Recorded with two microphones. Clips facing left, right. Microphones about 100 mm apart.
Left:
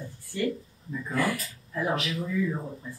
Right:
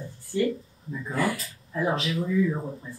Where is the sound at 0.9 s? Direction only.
10° right (ahead or behind).